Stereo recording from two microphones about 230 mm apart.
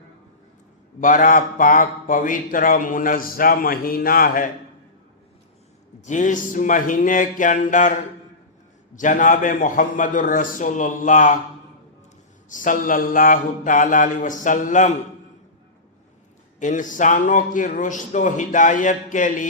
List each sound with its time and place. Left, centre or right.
1.0 s a man's voice: left
6.1 s a man's voice: left
9.0 s a man's voice: left
12.5 s a man's voice: left
16.6 s a man's voice: left